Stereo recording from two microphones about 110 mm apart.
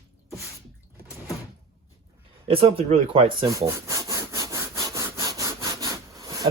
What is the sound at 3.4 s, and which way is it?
Sawing, 30° right (ahead or behind).